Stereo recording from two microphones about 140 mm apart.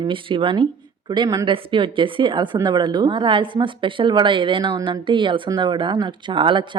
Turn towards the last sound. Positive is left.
turn(degrees=-35)  # may be behind; listen again after turning